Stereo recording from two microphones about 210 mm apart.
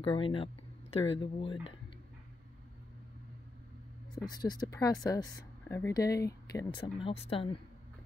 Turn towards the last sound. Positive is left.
turn(degrees=25)  # may be behind; listen again after turning